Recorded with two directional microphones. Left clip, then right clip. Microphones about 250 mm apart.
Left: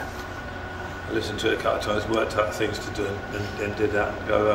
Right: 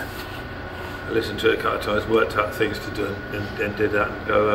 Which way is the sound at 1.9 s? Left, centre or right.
Centre.